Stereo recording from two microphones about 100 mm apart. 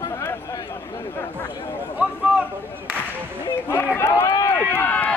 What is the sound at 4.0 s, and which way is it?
Run, 25° left (ahead or behind).